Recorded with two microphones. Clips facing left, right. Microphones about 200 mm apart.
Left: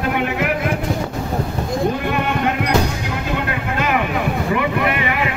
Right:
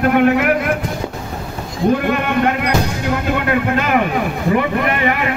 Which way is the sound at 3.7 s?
50° right (ahead or behind).